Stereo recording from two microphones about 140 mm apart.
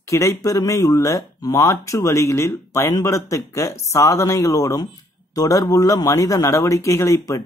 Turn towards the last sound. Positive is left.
turn(degrees=20)  # may be behind; listen again after turning